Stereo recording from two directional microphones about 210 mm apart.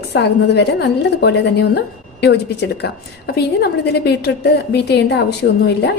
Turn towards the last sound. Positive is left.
turn(degrees=55)  # may be behind; listen again after turning